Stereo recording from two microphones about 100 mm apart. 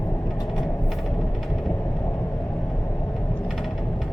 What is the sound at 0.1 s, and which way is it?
Vehicle, 45° left (ahead or behind).